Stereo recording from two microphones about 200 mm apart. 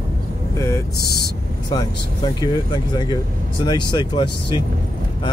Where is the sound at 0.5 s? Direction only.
15° left (ahead or behind).